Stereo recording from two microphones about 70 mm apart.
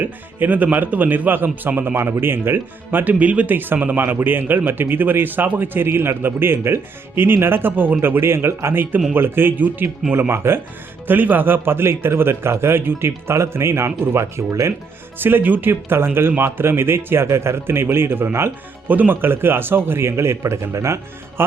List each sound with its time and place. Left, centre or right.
0.0 s a man's voice: right
15.2 s a man's voice: right